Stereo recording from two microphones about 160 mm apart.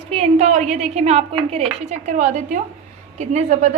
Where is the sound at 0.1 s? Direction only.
40° right (ahead or behind).